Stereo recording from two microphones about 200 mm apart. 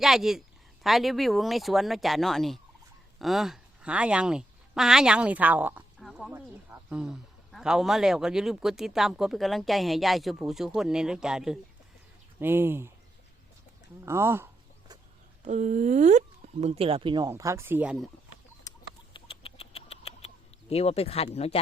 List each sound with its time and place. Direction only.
0.0 s a woman's voice: centre (ahead or behind)
6.0 s a sound: centre (ahead or behind)
6.3 s speech: 10° right (ahead or behind)
14.0 s a sound: 15° right (ahead or behind)
15.4 s speech: 35° right (ahead or behind); by 18.1 s 5° right (ahead or behind)
18.7 s rodents: 15° left (ahead or behind)
19.1 s rodents: 30° left (ahead or behind)
21.3 s speech: 30° left (ahead or behind)